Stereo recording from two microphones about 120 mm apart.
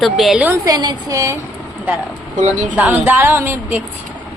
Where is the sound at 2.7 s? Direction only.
15° right (ahead or behind).